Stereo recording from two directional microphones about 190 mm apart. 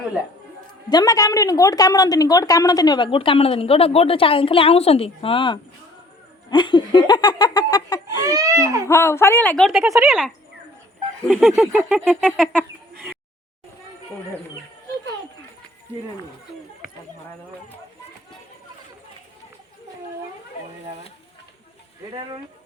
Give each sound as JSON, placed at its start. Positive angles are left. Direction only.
{"t": 0.9, "sound": "a woman's voice", "side_deg": 20}
{"t": 8.2, "sound": "speech", "side_deg": -20}
{"t": 8.9, "sound": "speech", "side_deg": 15}
{"t": 9.9, "sound": "speech", "side_deg": -15}
{"t": 11.3, "sound": "a sound", "side_deg": 0}
{"t": 11.5, "sound": "speech", "side_deg": -10}
{"t": 11.9, "sound": "speech", "side_deg": 5}
{"t": 22.1, "sound": "speech", "side_deg": -25}